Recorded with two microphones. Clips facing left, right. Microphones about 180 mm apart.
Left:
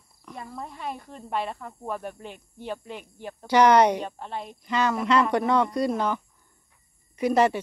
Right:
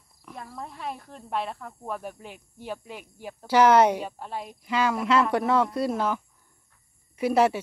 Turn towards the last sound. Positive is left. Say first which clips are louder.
# even
turn(degrees=-5)  # may be behind; listen again after turning